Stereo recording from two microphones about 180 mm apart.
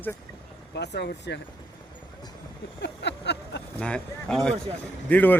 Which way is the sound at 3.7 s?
5° left (ahead or behind).